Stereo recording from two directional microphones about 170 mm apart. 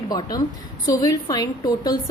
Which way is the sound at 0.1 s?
20° left (ahead or behind).